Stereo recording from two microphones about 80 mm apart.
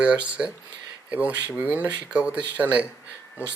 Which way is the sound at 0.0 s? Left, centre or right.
Centre.